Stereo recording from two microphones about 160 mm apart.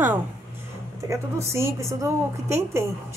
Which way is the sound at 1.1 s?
15° right (ahead or behind).